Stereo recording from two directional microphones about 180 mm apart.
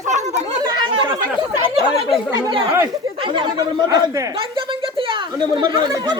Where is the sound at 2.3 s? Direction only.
25° right (ahead or behind).